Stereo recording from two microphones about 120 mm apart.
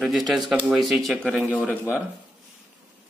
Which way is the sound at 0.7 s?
Centre (ahead or behind).